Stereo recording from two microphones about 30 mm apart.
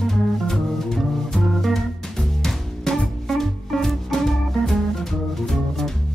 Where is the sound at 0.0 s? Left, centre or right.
Centre.